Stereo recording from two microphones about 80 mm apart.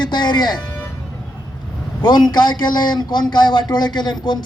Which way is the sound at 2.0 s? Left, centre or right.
Left.